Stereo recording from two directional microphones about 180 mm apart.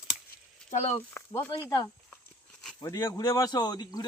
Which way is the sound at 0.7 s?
35° left (ahead or behind).